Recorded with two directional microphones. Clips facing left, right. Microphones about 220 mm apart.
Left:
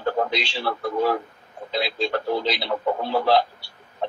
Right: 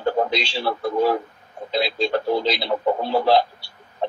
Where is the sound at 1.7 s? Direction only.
35° right (ahead or behind).